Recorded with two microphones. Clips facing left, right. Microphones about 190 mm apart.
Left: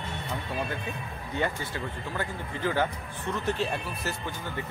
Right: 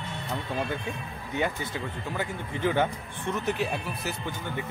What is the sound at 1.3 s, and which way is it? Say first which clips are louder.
Speech: right 1 dB; 15° right (ahead or behind).